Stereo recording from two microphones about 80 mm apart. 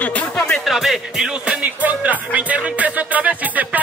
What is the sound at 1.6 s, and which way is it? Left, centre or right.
Music, right.